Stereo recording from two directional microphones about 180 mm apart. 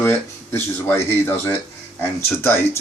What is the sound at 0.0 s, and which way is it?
Speech, 10° left (ahead or behind).